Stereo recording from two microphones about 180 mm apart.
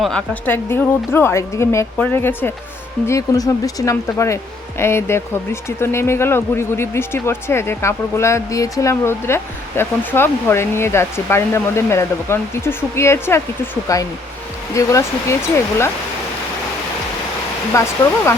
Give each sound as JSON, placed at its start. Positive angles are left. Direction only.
{"t": 0.0, "sound": "speech", "side_deg": 5}
{"t": 17.7, "sound": "speech", "side_deg": 15}